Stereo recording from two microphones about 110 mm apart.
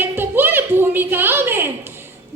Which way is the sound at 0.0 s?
20° right (ahead or behind).